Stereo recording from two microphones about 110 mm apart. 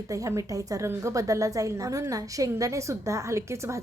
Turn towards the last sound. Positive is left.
turn(degrees=-25)  # may be behind; listen again after turning